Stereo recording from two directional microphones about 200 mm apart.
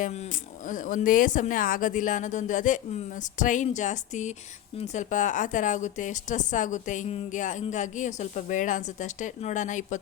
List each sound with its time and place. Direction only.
0.7 s a woman's voice: 40° left (ahead or behind)